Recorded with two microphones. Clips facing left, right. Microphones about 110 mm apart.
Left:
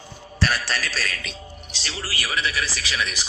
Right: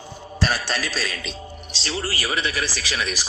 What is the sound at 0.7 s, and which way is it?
A man's voice, 30° right (ahead or behind).